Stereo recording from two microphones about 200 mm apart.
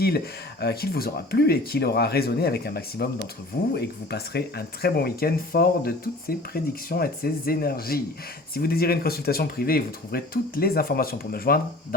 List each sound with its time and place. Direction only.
0.6 s speech: 50° left (ahead or behind)